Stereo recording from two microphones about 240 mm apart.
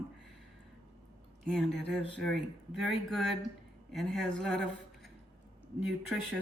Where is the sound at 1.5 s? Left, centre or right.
Centre.